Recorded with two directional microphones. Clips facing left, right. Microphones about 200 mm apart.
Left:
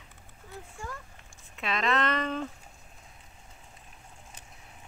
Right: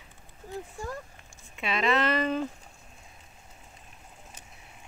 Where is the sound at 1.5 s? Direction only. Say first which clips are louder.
Right 2 dB; 5° right (ahead or behind).